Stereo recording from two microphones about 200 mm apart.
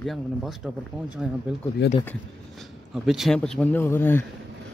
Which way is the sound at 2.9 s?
Centre (ahead or behind).